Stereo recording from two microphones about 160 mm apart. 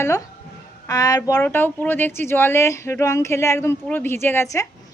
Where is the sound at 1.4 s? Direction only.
15° left (ahead or behind).